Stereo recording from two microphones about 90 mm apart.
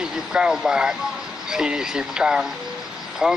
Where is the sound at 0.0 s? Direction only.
10° right (ahead or behind).